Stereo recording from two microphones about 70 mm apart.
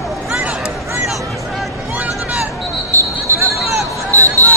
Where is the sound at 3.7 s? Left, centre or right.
Right.